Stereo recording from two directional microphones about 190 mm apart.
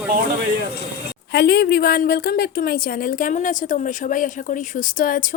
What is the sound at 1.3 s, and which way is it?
A woman's voice, 55° left (ahead or behind).